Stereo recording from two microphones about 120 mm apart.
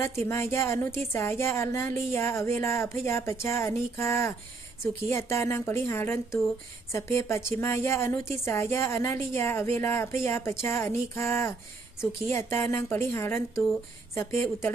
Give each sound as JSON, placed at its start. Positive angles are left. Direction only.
{"t": 0.0, "sound": "a woman's voice", "side_deg": 20}